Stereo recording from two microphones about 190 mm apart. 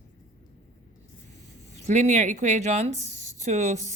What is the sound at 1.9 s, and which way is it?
A woman's voice, 40° right (ahead or behind).